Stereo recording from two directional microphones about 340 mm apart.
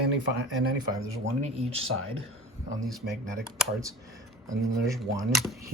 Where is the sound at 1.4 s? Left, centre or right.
Centre.